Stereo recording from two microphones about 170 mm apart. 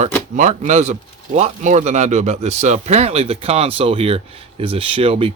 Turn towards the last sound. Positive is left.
turn(degrees=-35)  # may be behind; listen again after turning